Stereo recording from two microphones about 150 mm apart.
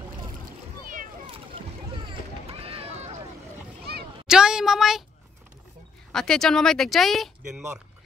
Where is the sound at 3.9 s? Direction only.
90° right.